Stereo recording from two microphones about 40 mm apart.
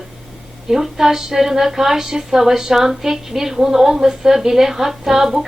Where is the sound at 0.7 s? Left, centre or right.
Centre.